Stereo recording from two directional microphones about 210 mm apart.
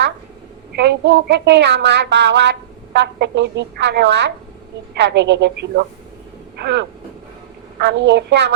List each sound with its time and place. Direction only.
0.8 s a woman's voice: 55° right (ahead or behind)
6.6 s a sound: 55° right (ahead or behind)
7.8 s a woman's voice: 55° right (ahead or behind)